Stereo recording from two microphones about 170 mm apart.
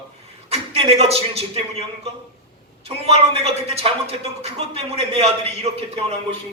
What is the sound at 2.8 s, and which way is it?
Speech, 35° right (ahead or behind).